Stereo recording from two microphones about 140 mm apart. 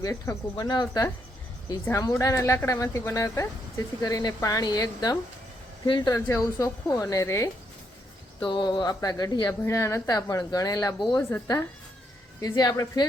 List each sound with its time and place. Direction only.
0.0 s speech: 25° left (ahead or behind)
8.4 s speech: 35° left (ahead or behind)